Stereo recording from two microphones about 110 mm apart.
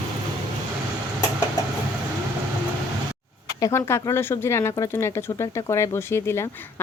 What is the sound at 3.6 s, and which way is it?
Speech, 25° left (ahead or behind).